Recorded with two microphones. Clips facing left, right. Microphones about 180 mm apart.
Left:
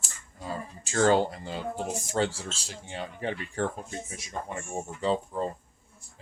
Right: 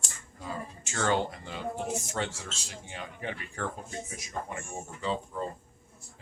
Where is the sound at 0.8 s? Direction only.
35° left (ahead or behind).